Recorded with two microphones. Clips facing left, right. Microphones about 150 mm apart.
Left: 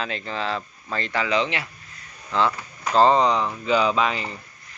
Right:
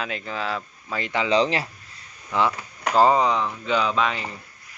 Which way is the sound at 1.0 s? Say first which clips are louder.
Right 1 dB; 20° right (ahead or behind).